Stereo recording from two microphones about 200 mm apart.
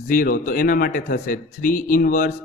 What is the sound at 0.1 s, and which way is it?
Mantra, 45° left (ahead or behind).